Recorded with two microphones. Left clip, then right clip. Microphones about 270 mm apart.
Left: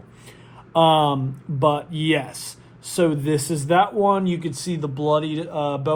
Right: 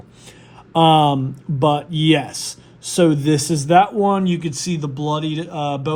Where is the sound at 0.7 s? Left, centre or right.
Right.